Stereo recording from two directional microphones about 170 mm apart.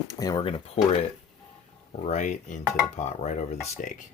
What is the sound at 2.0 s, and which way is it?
Speech, 45° left (ahead or behind).